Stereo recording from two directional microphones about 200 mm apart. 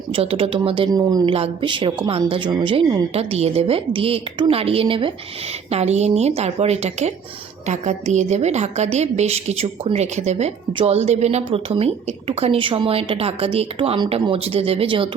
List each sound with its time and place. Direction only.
0.1 s a woman's voice: 30° right (ahead or behind)